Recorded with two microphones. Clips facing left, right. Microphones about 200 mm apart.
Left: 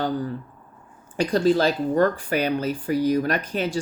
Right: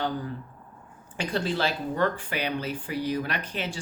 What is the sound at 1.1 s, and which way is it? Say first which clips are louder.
Speech: left 9 dB; 40° left (ahead or behind).